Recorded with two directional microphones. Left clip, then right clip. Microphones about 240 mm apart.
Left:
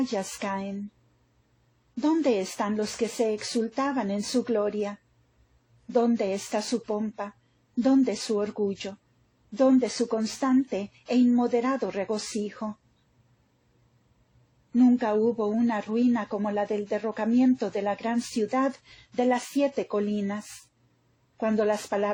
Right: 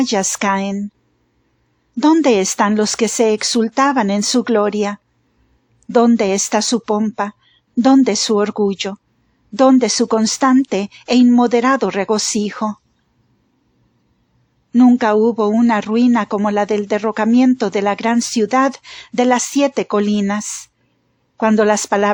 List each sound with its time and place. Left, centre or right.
0.0 s speech: right
2.0 s speech: right
14.8 s speech: right